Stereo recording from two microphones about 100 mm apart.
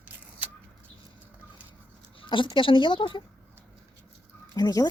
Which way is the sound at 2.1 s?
60° left (ahead or behind).